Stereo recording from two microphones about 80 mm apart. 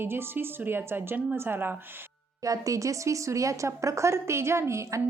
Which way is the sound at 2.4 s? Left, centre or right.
Right.